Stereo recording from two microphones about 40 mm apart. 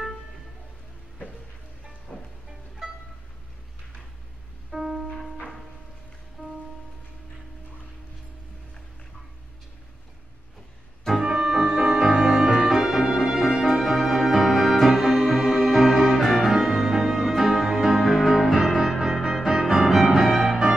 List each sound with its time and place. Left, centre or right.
2.1 s music: left
4.6 s music: centre
5.0 s music: centre
6.4 s music: centre
11.2 s music: centre
16.3 s music: centre
18.8 s music: centre